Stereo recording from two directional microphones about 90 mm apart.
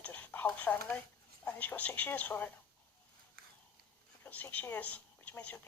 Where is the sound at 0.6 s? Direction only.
15° left (ahead or behind).